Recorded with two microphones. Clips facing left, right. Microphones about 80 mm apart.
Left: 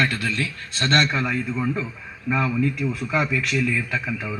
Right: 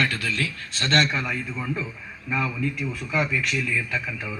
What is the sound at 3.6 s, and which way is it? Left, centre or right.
Speech, centre.